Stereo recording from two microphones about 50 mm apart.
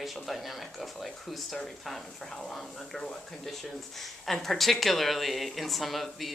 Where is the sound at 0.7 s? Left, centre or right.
Centre.